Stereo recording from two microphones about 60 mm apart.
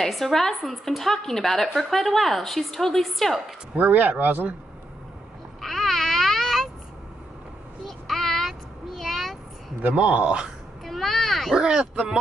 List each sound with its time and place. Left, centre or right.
0.0 s a woman's voice: centre
3.7 s speech: right
5.6 s babbling: centre
7.8 s child singing: centre
9.8 s speech: right
10.9 s a sound: centre
11.5 s speech: centre